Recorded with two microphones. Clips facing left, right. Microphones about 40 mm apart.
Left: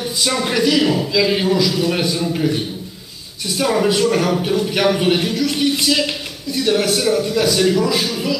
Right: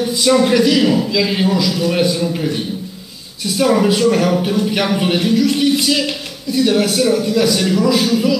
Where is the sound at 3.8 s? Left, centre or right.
Centre.